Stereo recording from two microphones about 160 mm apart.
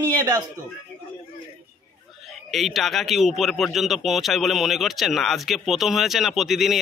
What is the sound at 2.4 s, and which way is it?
A man's voice, centre (ahead or behind).